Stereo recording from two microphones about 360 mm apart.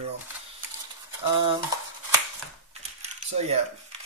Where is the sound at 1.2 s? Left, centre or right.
Centre.